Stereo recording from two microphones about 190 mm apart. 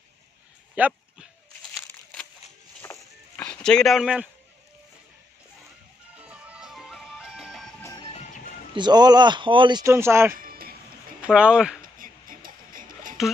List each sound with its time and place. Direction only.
0.7 s a sound: 5° right (ahead or behind)
2.8 s a sound: 10° left (ahead or behind)
6.1 s music: 5° right (ahead or behind)
7.8 s music: 20° left (ahead or behind)
8.7 s speech: 20° right (ahead or behind)
10.3 s music: 50° right (ahead or behind)
11.2 s speech: 5° right (ahead or behind)
11.8 s music: 50° right (ahead or behind)